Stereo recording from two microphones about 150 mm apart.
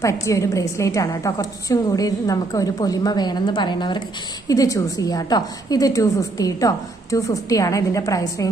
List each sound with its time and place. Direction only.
0.0 s a woman's voice: 20° left (ahead or behind)